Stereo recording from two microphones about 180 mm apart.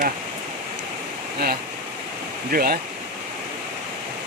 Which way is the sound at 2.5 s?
55° right (ahead or behind).